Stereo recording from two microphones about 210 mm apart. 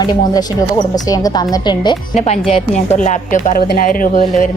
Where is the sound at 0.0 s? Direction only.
20° left (ahead or behind).